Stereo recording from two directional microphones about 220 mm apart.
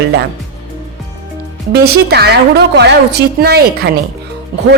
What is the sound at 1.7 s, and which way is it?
A woman's voice, 45° right (ahead or behind).